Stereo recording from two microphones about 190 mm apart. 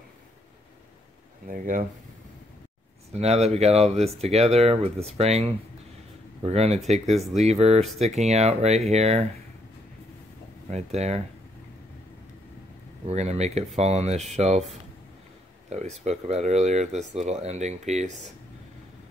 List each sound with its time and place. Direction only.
1.5 s speech: 45° right (ahead or behind)
3.1 s speech: 35° right (ahead or behind)
10.7 s speech: 35° right (ahead or behind)
13.0 s speech: 35° right (ahead or behind)